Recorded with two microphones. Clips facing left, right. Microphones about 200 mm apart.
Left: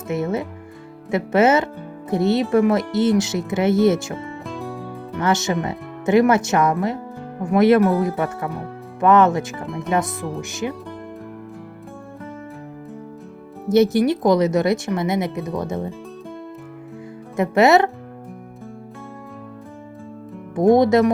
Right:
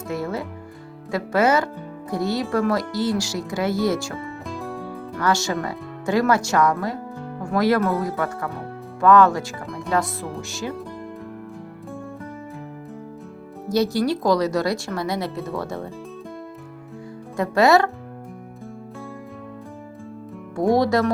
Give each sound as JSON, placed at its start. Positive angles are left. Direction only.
{"t": 0.1, "sound": "speech", "side_deg": 20}
{"t": 4.4, "sound": "music", "side_deg": 0}
{"t": 5.1, "sound": "speech", "side_deg": 20}
{"t": 9.6, "sound": "speech", "side_deg": 0}
{"t": 9.9, "sound": "speech", "side_deg": 20}
{"t": 13.7, "sound": "speech", "side_deg": 20}
{"t": 17.3, "sound": "speech", "side_deg": 20}
{"t": 20.6, "sound": "speech", "side_deg": 20}